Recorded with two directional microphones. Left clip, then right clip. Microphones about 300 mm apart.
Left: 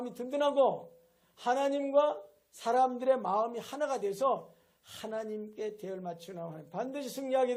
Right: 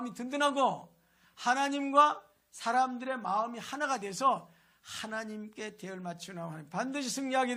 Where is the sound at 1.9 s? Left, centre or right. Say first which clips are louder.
Right 4 dB; centre.